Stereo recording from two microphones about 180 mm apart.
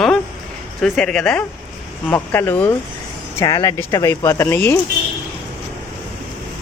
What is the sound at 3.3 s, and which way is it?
Speech, 20° left (ahead or behind).